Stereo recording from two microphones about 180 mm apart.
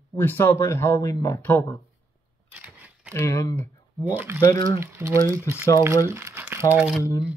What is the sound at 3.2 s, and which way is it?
Speech, 15° left (ahead or behind).